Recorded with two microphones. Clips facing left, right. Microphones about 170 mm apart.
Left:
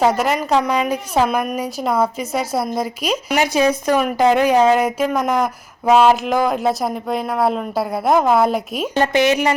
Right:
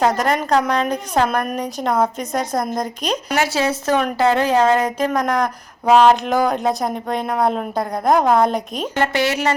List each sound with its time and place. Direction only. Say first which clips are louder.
0.0 s a woman's voice: left 1 dB; 5° left (ahead or behind)
3.3 s a woman's voice: left 4 dB; 15° left (ahead or behind)
9.0 s speech: left 4 dB; 20° left (ahead or behind)